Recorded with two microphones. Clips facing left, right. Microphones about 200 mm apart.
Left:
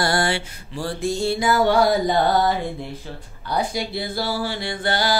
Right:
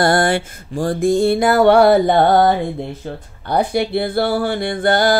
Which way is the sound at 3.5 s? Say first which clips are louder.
Right 7 dB; 60° right (ahead or behind).